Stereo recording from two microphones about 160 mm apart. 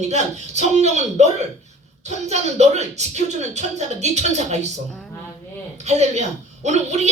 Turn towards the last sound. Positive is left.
turn(degrees=-45)  # may be behind; listen again after turning